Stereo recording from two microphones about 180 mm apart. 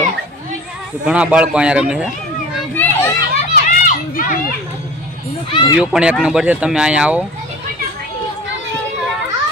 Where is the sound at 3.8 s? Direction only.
50° left (ahead or behind).